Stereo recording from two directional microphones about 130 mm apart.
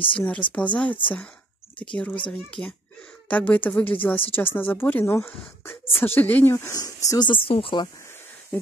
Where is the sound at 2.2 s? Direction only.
10° left (ahead or behind); by 7.9 s 40° left (ahead or behind).